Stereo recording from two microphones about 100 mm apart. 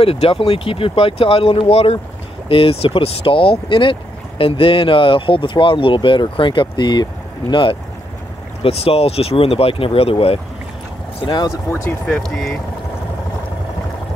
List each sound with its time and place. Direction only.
0.0 s speech: 75° left (ahead or behind); by 7.7 s 50° left (ahead or behind)
8.6 s speech: 80° left
11.2 s speech: 45° left (ahead or behind)
12.1 s speech: 5° left (ahead or behind)